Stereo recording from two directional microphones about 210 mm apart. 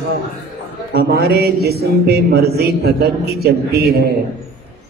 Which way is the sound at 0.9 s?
50° right (ahead or behind).